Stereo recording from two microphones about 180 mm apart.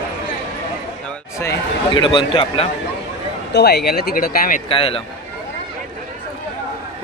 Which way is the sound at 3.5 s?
65° left (ahead or behind).